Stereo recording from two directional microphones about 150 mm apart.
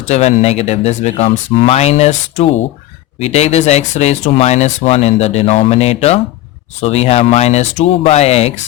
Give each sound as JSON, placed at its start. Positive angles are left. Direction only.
{"t": 0.1, "sound": "speech", "side_deg": 45}